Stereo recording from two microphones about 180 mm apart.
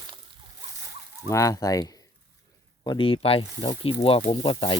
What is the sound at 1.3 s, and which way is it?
Speech, 20° left (ahead or behind).